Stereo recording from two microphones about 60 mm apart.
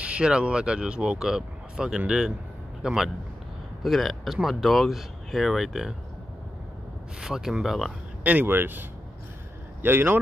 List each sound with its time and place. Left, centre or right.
0.0 s speech: centre
3.8 s speech: centre
7.2 s speech: centre
8.2 s speech: right
8.5 s a man's voice: right